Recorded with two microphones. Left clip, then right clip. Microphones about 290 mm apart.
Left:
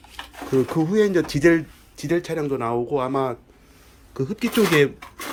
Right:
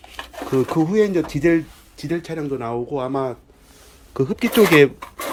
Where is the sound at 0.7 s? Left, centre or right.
Centre.